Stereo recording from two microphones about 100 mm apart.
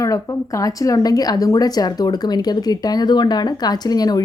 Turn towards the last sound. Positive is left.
turn(degrees=40)  # may be behind; listen again after turning